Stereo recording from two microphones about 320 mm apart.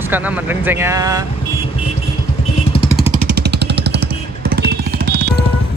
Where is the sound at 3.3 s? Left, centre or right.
Right.